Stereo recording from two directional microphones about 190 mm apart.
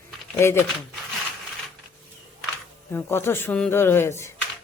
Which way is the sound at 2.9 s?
10° left (ahead or behind).